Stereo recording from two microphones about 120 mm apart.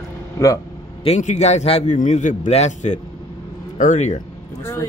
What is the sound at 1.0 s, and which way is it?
A man's voice, 65° left (ahead or behind).